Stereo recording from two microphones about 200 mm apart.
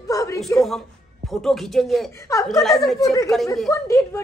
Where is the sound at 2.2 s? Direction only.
15° left (ahead or behind).